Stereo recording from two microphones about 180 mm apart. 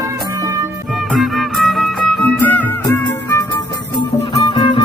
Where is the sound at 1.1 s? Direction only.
Centre (ahead or behind).